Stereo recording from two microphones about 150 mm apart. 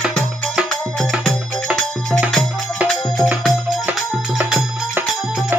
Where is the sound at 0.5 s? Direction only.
5° left (ahead or behind).